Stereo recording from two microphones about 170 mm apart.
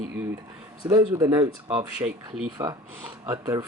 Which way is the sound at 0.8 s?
20° right (ahead or behind).